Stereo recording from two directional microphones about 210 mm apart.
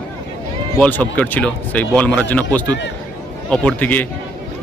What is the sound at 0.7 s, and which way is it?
A man's voice, 10° left (ahead or behind).